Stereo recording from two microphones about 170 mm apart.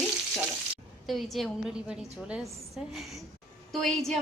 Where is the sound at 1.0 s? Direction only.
Centre (ahead or behind).